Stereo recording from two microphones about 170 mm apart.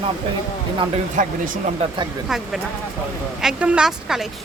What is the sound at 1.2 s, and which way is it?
Speech, 50° right (ahead or behind).